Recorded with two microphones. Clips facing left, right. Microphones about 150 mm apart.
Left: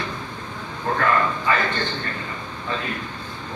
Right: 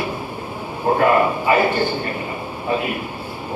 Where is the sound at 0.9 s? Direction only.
20° right (ahead or behind).